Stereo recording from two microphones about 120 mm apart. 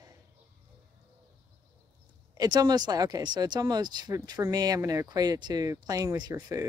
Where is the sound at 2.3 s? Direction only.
35° right (ahead or behind).